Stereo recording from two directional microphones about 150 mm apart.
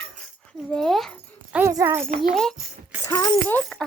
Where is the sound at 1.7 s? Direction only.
20° right (ahead or behind).